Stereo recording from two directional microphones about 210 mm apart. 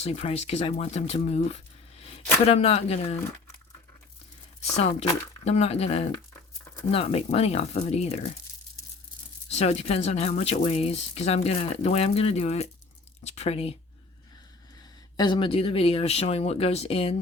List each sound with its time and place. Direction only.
0.0 s speech: 30° left (ahead or behind)
4.6 s speech: 30° left (ahead or behind)
9.5 s speech: 30° left (ahead or behind)
15.1 s speech: 20° left (ahead or behind)